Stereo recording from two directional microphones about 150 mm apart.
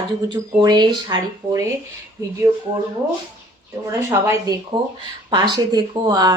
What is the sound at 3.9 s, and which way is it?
Speech, 20° right (ahead or behind).